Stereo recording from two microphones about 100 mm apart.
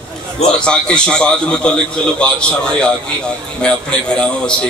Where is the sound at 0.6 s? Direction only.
10° left (ahead or behind).